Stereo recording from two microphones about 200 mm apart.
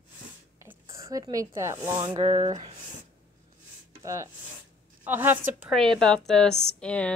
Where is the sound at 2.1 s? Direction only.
35° right (ahead or behind).